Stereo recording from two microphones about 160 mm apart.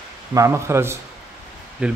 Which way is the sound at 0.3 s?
20° right (ahead or behind).